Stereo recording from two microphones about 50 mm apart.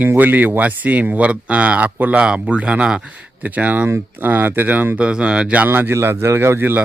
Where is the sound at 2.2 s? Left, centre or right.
Right.